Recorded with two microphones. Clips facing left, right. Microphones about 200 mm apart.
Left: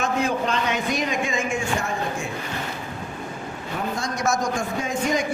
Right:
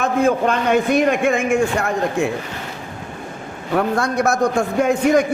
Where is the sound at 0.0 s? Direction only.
55° right (ahead or behind).